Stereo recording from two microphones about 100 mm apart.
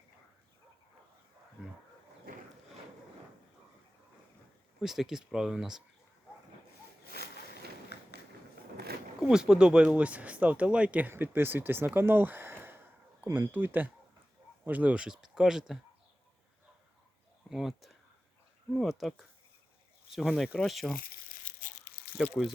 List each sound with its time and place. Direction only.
4.8 s speech: 5° right (ahead or behind)
9.2 s speech: 5° right (ahead or behind)
17.5 s speech: 5° right (ahead or behind)